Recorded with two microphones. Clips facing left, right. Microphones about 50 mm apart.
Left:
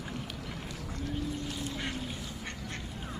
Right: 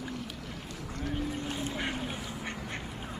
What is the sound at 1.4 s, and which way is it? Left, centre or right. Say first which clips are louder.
Boat: right 3 dB; right.